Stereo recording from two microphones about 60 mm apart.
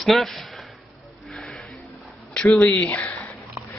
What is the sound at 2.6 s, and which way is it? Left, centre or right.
Speech, left.